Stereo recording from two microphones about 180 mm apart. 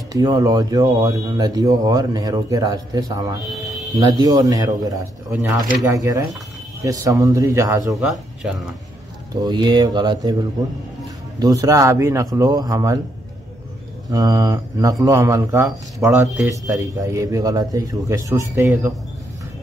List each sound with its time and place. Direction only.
0.1 s speech: 20° right (ahead or behind)
5.3 s speech: 10° right (ahead or behind)
8.0 s speech: 5° right (ahead or behind)
9.3 s speech: 25° right (ahead or behind)
11.3 s speech: 20° right (ahead or behind)
14.0 s speech: 20° right (ahead or behind)